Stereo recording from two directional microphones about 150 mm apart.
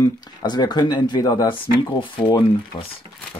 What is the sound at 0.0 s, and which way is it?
Speech, 25° left (ahead or behind).